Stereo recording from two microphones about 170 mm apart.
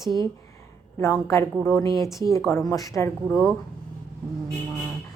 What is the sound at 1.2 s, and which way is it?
A woman's voice, 15° left (ahead or behind).